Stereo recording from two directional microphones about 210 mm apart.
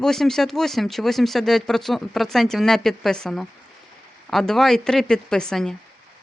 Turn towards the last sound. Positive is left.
turn(degrees=5)  # may be behind; listen again after turning